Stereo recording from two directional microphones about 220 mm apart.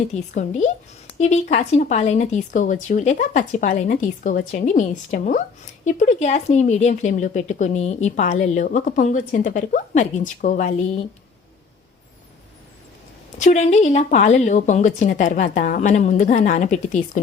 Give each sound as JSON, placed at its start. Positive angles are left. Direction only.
{"t": 0.1, "sound": "speech", "side_deg": 30}
{"t": 13.4, "sound": "speech", "side_deg": 30}